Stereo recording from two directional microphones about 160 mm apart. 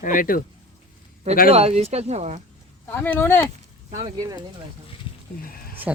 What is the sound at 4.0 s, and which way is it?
Speech, 25° right (ahead or behind).